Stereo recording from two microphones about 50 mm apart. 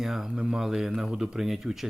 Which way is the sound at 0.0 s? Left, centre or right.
Centre.